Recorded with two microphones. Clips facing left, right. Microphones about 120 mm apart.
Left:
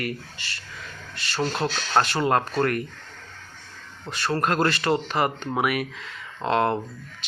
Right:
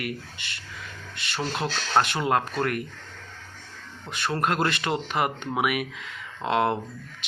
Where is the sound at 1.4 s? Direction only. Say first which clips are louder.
Left 3 dB; 5° right (ahead or behind).